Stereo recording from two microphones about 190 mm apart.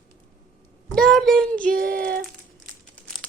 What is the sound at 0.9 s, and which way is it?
Child singing, 5° left (ahead or behind).